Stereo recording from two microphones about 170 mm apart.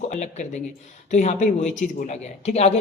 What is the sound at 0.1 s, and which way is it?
A woman's voice, 45° left (ahead or behind).